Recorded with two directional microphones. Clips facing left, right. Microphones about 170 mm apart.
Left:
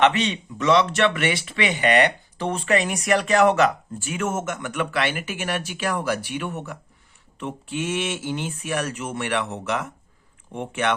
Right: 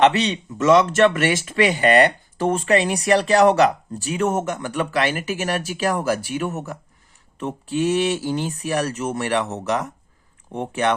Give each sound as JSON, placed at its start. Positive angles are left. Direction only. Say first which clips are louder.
{"t": 0.0, "sound": "speech", "louder": "right 3 dB", "side_deg": -35}